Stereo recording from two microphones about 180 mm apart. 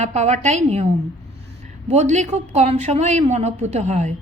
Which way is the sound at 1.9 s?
40° right (ahead or behind).